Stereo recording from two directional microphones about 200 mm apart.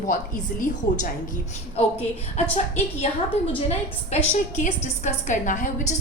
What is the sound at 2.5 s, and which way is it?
A woman's voice, 35° left (ahead or behind).